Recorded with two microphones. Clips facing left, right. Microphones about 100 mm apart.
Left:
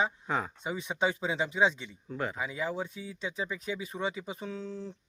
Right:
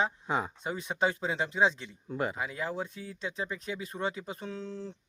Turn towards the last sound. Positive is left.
turn(degrees=0)  # may be behind; listen again after turning